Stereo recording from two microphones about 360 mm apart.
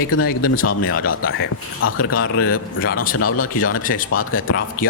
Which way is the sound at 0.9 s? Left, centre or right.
Left.